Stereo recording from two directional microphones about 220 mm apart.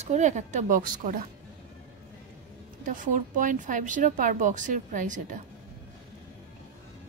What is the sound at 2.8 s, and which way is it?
A woman's voice, 35° right (ahead or behind).